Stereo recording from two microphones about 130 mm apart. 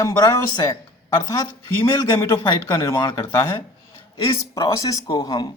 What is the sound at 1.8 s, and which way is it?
A man's voice, 35° left (ahead or behind).